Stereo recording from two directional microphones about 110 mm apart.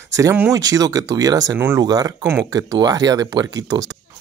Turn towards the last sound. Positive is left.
turn(degrees=-35)  # may be behind; listen again after turning